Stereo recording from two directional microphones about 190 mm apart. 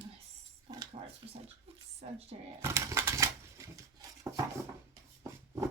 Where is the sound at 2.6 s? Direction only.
15° right (ahead or behind).